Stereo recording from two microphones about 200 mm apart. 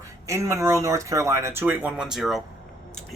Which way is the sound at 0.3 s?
15° right (ahead or behind).